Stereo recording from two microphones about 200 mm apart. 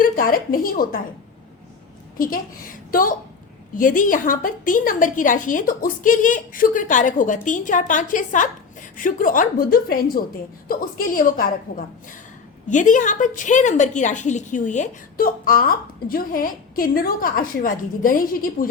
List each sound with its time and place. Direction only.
0.0 s a woman's voice: 45° left (ahead or behind)
2.1 s a woman's voice: 45° left (ahead or behind)